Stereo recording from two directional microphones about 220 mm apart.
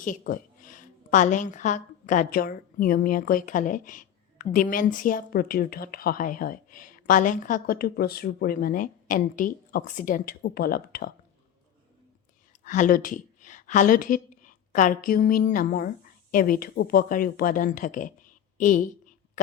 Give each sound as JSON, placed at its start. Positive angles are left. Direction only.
{"t": 0.0, "sound": "a woman's voice", "side_deg": 35}
{"t": 12.6, "sound": "a woman's voice", "side_deg": 35}